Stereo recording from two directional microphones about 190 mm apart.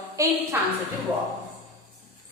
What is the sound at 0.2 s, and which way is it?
Speech, 15° right (ahead or behind).